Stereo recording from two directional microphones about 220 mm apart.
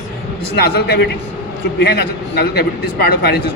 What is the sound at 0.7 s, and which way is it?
A man's voice, 45° left (ahead or behind).